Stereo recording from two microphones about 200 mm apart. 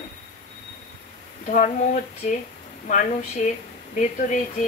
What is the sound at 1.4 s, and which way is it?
Speech, 40° left (ahead or behind).